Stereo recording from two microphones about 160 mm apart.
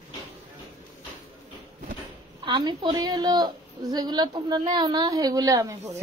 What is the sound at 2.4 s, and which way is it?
A woman's voice, 25° right (ahead or behind).